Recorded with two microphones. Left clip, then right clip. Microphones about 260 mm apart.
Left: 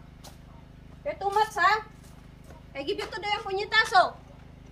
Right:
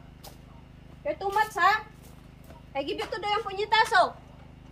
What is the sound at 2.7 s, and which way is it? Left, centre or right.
A woman's voice, centre.